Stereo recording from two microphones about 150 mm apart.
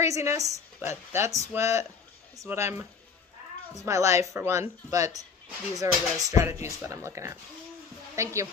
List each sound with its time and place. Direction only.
0.0 s a woman's voice: 20° right (ahead or behind)
3.8 s speech: 20° right (ahead or behind)